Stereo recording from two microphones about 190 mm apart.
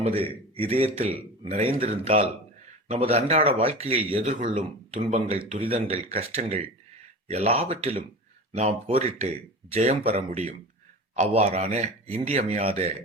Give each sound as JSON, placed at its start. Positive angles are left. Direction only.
{"t": 0.0, "sound": "speech", "side_deg": -30}
{"t": 4.2, "sound": "speech", "side_deg": -45}